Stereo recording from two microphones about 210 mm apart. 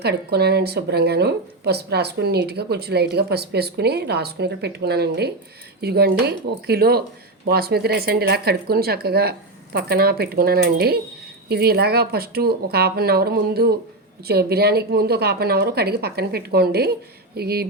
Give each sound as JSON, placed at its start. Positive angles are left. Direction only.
{"t": 0.0, "sound": "a woman's voice", "side_deg": -50}